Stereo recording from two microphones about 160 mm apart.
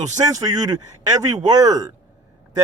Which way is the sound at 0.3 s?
25° right (ahead or behind).